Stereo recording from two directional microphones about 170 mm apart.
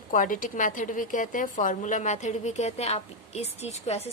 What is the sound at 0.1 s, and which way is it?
A woman's voice, 50° left (ahead or behind).